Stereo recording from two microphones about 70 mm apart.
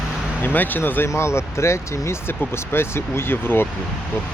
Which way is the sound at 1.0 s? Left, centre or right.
Left.